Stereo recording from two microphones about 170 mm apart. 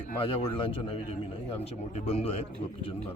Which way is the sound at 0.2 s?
30° left (ahead or behind).